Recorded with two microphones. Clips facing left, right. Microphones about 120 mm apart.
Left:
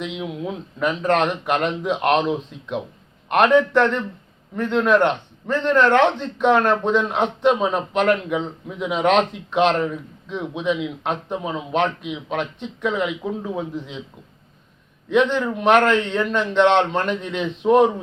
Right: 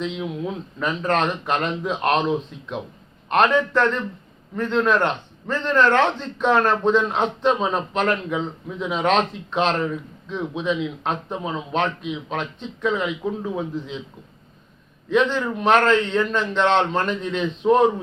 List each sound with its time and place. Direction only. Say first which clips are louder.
0.0 s a man's voice: right 1 dB; 15° left (ahead or behind)
15.1 s a man's voice: left 1 dB; 15° left (ahead or behind)